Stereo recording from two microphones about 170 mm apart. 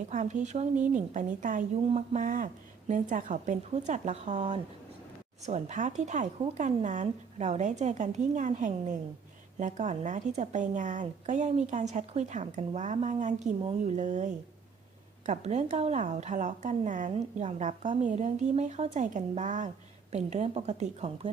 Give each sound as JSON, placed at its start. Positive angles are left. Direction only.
{"t": 0.1, "sound": "a woman's voice", "side_deg": -45}
{"t": 15.3, "sound": "a woman's voice", "side_deg": -40}